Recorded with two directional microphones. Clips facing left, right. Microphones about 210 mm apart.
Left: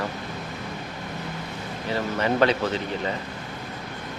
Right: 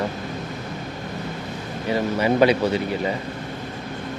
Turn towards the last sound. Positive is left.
turn(degrees=-10)  # may be behind; listen again after turning